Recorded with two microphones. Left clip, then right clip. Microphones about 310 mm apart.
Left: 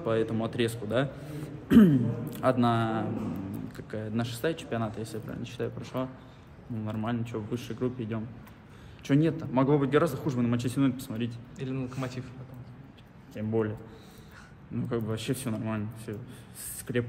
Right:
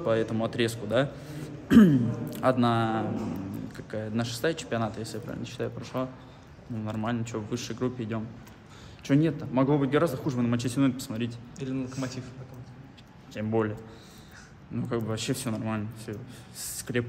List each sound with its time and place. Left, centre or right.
0.0 s speech: centre
11.5 s a man's voice: left
13.3 s a man's voice: centre
14.8 s speech: centre